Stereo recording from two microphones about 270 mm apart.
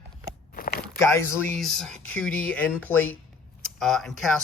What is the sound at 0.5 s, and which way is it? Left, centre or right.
Crumpling, left.